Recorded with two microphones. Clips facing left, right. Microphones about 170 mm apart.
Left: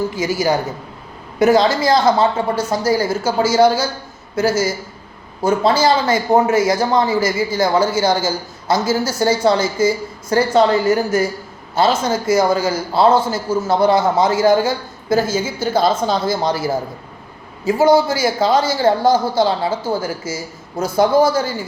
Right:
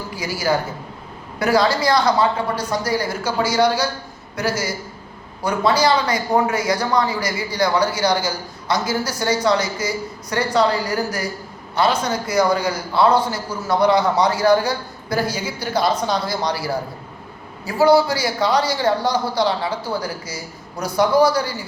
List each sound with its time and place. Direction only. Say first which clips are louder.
0.2 s a man's voice: left 1 dB; 20° left (ahead or behind)